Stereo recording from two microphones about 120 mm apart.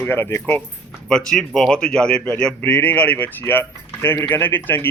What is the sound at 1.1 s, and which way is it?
Speech, 5° left (ahead or behind).